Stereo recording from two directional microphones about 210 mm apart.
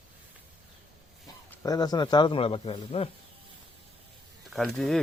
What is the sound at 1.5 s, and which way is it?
A man's voice, 15° left (ahead or behind).